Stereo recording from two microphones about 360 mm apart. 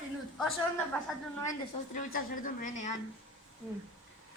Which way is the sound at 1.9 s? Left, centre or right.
Left.